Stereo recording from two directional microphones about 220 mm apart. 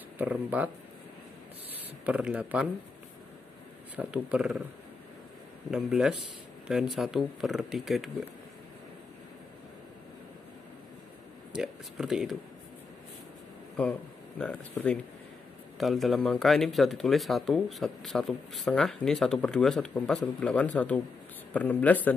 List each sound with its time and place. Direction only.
0.2 s speech: 5° right (ahead or behind)
2.0 s speech: 5° right (ahead or behind)
3.9 s speech: 5° right (ahead or behind)
5.7 s speech: centre (ahead or behind)
11.5 s speech: centre (ahead or behind)
13.8 s speech: 5° left (ahead or behind)